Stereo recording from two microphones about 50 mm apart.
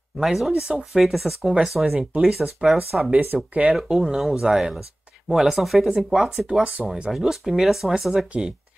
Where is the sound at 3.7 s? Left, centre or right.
Centre.